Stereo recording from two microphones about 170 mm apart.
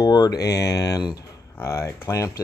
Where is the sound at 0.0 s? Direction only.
25° left (ahead or behind).